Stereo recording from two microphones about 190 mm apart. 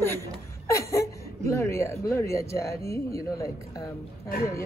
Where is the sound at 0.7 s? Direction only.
15° left (ahead or behind).